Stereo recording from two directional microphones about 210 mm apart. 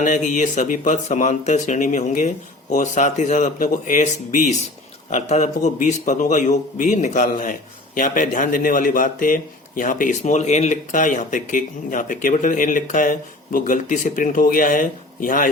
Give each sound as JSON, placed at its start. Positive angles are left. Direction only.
{"t": 0.0, "sound": "a man's voice", "side_deg": 35}